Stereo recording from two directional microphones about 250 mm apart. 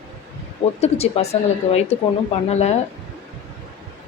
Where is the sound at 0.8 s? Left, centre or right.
Left.